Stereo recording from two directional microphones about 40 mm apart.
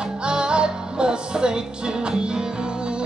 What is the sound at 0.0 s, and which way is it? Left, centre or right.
Music, right.